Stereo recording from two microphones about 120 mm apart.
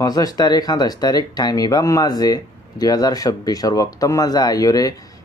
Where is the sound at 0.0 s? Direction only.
30° left (ahead or behind).